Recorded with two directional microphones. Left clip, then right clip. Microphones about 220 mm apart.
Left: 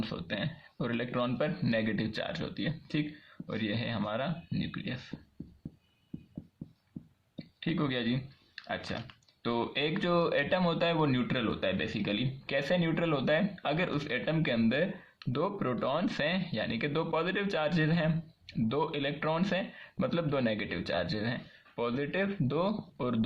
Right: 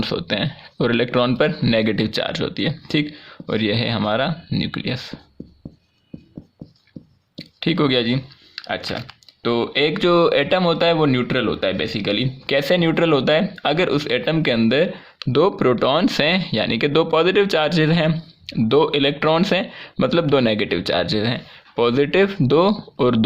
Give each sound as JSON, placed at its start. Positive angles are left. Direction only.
{"t": 0.0, "sound": "speech", "side_deg": -45}
{"t": 7.3, "sound": "speech", "side_deg": -50}